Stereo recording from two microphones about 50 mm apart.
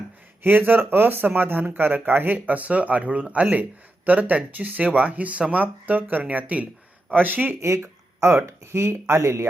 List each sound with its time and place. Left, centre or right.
0.4 s speech: right
7.6 s speech: right